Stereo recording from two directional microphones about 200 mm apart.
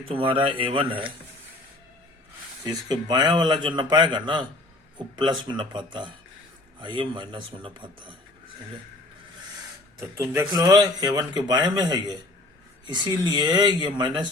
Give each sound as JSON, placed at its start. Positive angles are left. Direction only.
{"t": 0.1, "sound": "speech", "side_deg": -25}
{"t": 2.9, "sound": "speech", "side_deg": -20}
{"t": 10.2, "sound": "speech", "side_deg": -15}